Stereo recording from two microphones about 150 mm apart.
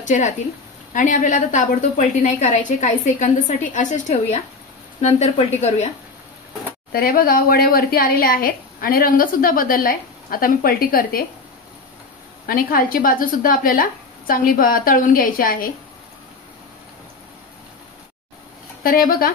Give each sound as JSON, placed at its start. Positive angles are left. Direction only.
{"t": 0.0, "sound": "a woman's voice", "side_deg": 55}
{"t": 6.9, "sound": "speech", "side_deg": 80}
{"t": 12.4, "sound": "speech", "side_deg": 75}
{"t": 18.8, "sound": "speech", "side_deg": 80}